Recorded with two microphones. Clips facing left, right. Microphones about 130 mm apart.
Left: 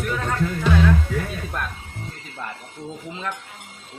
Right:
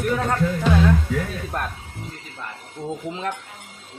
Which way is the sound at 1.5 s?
35° right (ahead or behind).